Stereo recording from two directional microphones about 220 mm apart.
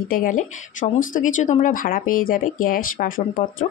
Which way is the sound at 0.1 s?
40° left (ahead or behind).